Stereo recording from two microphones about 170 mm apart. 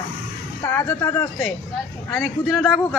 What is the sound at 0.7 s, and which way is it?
Speech, 15° left (ahead or behind).